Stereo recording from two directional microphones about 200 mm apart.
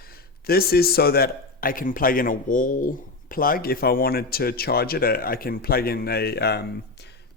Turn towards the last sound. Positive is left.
turn(degrees=55)  # may be behind; listen again after turning